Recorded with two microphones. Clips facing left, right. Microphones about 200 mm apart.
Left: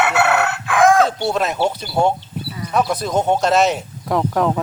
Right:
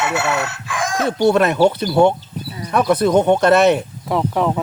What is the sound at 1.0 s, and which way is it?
Speech, 60° right (ahead or behind).